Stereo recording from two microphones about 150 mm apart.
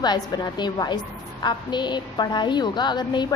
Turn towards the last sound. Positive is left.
turn(degrees=30)  # may be behind; listen again after turning